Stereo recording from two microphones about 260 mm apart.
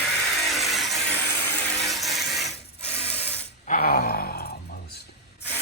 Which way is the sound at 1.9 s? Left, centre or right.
Centre.